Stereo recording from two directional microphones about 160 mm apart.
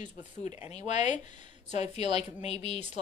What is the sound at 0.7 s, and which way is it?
A woman's voice, 45° left (ahead or behind).